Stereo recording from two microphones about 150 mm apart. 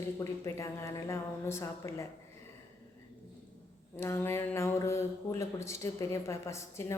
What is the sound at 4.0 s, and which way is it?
A woman's voice, 15° left (ahead or behind).